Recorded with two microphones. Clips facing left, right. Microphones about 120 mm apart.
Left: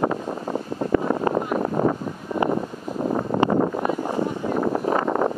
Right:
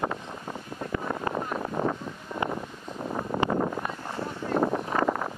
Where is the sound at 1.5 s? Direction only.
55° left (ahead or behind).